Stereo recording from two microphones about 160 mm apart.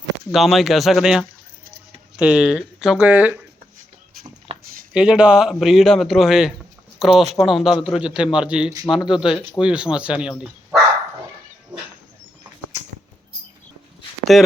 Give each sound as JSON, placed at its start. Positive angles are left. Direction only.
{"t": 0.3, "sound": "a man's voice", "side_deg": 0}
{"t": 4.5, "sound": "a sound", "side_deg": -35}
{"t": 4.9, "sound": "a man's voice", "side_deg": -5}
{"t": 14.3, "sound": "a man's voice", "side_deg": 0}